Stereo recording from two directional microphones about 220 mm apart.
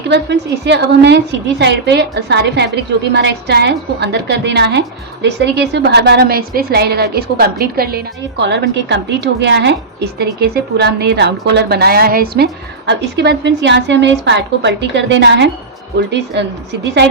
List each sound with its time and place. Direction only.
0.1 s a woman's voice: 50° right (ahead or behind)